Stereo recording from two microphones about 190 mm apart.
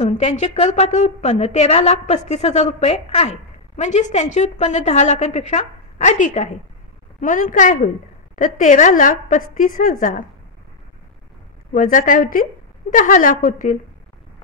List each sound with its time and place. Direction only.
0.0 s a woman's voice: 35° left (ahead or behind)
11.7 s a woman's voice: 45° left (ahead or behind)